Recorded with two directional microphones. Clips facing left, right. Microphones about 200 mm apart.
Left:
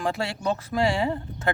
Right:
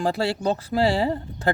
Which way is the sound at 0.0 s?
35° right (ahead or behind).